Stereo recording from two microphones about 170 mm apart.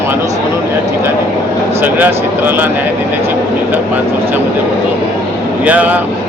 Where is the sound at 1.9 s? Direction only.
10° right (ahead or behind).